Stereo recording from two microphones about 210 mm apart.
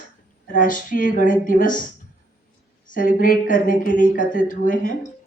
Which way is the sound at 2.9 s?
40° left (ahead or behind).